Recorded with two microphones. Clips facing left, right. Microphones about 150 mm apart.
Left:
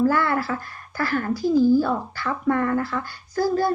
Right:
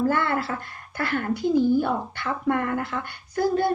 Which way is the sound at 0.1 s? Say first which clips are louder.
Left 2 dB; 25° right (ahead or behind).